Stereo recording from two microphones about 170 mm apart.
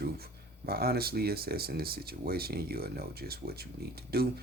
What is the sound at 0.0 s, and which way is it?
Speech, 65° right (ahead or behind).